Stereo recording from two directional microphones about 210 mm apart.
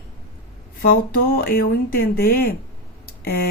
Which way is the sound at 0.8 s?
45° left (ahead or behind).